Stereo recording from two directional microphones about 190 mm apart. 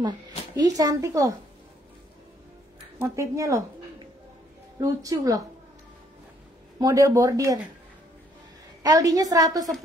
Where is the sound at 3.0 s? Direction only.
15° right (ahead or behind).